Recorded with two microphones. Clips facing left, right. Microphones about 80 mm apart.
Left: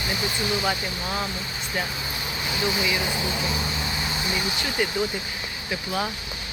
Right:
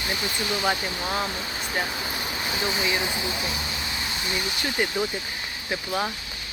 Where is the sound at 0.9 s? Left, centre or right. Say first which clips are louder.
Right 1 dB; centre.